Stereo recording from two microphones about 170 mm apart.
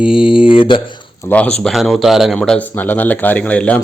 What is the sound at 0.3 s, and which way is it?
Speech, 30° left (ahead or behind).